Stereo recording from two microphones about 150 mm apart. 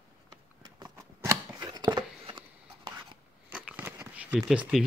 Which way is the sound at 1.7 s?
25° right (ahead or behind).